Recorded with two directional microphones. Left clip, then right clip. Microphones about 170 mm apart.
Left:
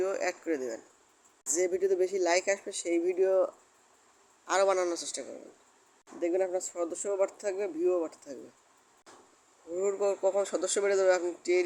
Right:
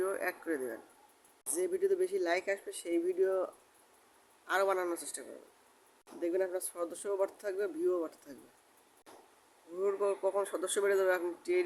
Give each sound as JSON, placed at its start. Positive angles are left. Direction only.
{"t": 0.0, "sound": "speech", "side_deg": 5}
{"t": 9.8, "sound": "speech", "side_deg": 10}